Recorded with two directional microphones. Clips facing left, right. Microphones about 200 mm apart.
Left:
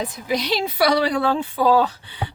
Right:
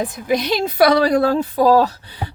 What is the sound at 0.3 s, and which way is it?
A woman's voice, 50° right (ahead or behind).